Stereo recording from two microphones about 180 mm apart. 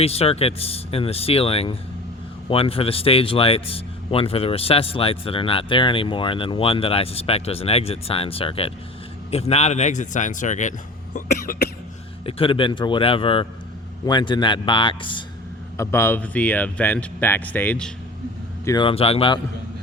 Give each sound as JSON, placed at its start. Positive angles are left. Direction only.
{"t": 0.0, "sound": "speech", "side_deg": 35}
{"t": 12.2, "sound": "a man's voice", "side_deg": 30}
{"t": 15.8, "sound": "speech", "side_deg": 15}
{"t": 18.6, "sound": "a man's voice", "side_deg": 20}
{"t": 18.9, "sound": "speech", "side_deg": 30}